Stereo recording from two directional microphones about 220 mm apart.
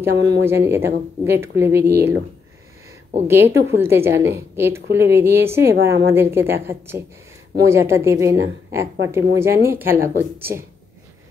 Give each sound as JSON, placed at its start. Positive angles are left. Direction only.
{"t": 0.1, "sound": "speech", "side_deg": -55}
{"t": 0.5, "sound": "speech", "side_deg": -10}
{"t": 3.3, "sound": "speech", "side_deg": -10}